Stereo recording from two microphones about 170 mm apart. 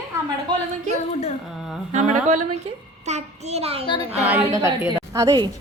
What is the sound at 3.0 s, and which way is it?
Speech, 40° right (ahead or behind).